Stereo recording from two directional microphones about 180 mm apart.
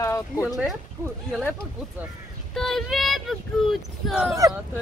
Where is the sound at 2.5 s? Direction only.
Centre (ahead or behind).